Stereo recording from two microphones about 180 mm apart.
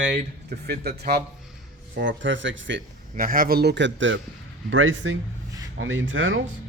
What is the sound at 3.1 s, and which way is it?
Speech, 50° right (ahead or behind).